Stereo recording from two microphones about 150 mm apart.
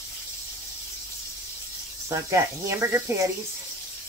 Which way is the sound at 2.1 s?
20° right (ahead or behind).